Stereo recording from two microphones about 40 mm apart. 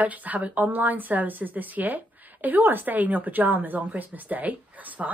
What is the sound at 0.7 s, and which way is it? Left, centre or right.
A woman's voice, right.